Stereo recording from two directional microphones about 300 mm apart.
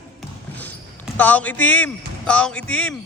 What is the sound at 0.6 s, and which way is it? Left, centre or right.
Basketball bounce, centre.